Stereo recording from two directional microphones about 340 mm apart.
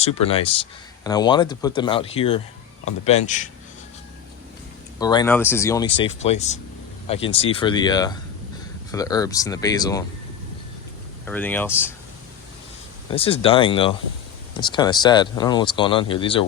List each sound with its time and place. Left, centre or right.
0.0 s speech: centre
4.9 s speech: centre
11.3 s speech: centre
13.1 s speech: centre